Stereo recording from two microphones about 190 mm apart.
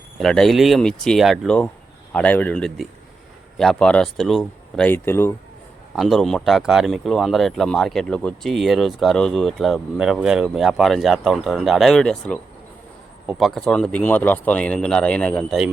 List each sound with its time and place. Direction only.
0.2 s a man's voice: 5° left (ahead or behind)
6.0 s speech: centre (ahead or behind)